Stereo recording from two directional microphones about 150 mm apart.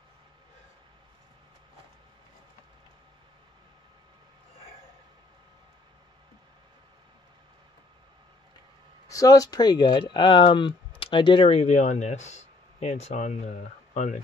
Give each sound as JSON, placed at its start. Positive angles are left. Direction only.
{"t": 9.0, "sound": "speech", "side_deg": 20}